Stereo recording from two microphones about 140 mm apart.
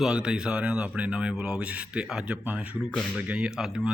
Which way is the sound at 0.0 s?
5° right (ahead or behind).